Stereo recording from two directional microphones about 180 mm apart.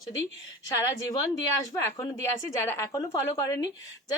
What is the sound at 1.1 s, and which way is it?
A woman's voice, 20° left (ahead or behind).